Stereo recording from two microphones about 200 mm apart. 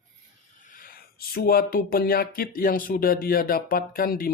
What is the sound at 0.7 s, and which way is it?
Speech, 45° left (ahead or behind).